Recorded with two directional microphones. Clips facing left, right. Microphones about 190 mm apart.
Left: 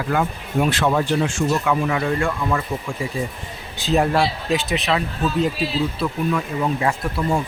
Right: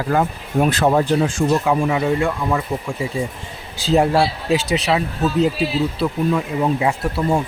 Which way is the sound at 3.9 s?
30° right (ahead or behind).